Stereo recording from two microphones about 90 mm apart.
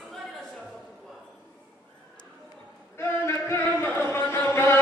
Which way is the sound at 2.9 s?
30° left (ahead or behind).